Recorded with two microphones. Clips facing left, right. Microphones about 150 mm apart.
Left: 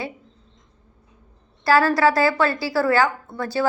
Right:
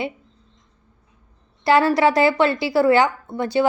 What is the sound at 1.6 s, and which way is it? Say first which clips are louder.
A woman's voice: right 1 dB; 20° right (ahead or behind).